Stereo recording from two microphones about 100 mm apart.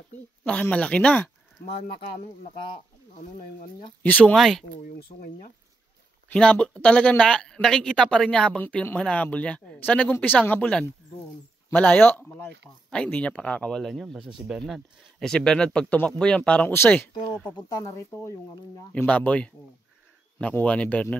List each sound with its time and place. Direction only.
0.5 s speech: 15° left (ahead or behind)
2.0 s speech: 90° left
4.0 s speech: 15° left (ahead or behind)
4.4 s speech: 5° left (ahead or behind)
6.3 s speech: 10° left (ahead or behind)
16.7 s speech: 25° left (ahead or behind)
18.9 s speech: 10° left (ahead or behind)